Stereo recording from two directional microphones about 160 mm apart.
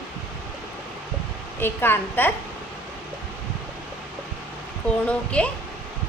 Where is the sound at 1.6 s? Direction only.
15° left (ahead or behind).